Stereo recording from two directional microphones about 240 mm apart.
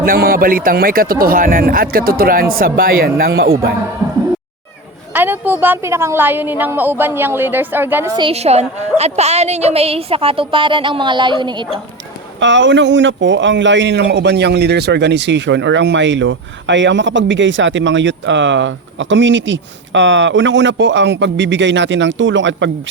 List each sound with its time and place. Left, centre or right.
0.0 s speech: right
5.1 s a woman's voice: centre
8.2 s a woman's voice: right
12.4 s a man's voice: right